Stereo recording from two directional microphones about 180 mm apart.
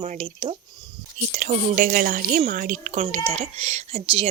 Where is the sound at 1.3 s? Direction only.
50° right (ahead or behind); by 4.3 s 30° right (ahead or behind).